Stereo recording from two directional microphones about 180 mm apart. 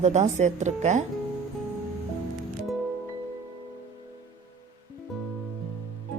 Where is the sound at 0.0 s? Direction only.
40° right (ahead or behind).